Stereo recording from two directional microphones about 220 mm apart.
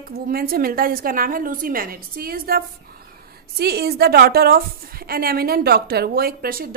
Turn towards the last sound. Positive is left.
turn(degrees=-40)  # may be behind; listen again after turning